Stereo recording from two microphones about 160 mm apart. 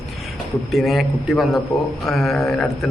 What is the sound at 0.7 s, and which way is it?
Speech, centre (ahead or behind).